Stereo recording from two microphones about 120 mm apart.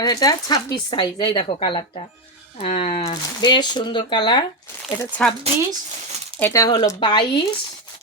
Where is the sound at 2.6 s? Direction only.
70° left (ahead or behind).